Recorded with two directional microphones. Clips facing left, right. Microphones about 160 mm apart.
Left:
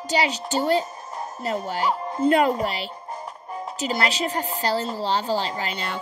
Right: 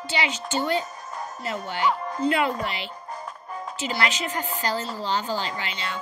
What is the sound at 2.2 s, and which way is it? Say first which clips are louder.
Speech: left 5 dB; 40° left (ahead or behind).